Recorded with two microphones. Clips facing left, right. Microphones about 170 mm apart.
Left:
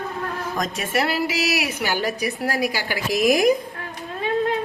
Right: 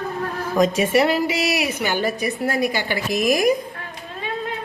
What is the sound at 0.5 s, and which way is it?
A woman's voice, centre (ahead or behind).